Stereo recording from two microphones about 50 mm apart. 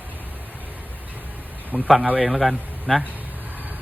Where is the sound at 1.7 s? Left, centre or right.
Right.